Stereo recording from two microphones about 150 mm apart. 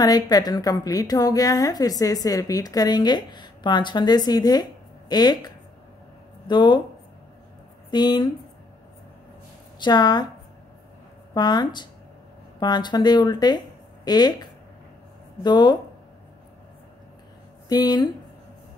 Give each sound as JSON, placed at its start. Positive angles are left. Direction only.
{"t": 0.0, "sound": "a woman's voice", "side_deg": 25}
{"t": 7.9, "sound": "a woman's voice", "side_deg": 30}
{"t": 9.8, "sound": "a woman's voice", "side_deg": 30}
{"t": 11.3, "sound": "a woman's voice", "side_deg": 30}
{"t": 17.6, "sound": "a woman's voice", "side_deg": 25}